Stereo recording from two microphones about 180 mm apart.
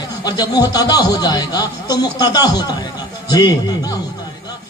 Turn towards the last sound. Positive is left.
turn(degrees=20)  # may be behind; listen again after turning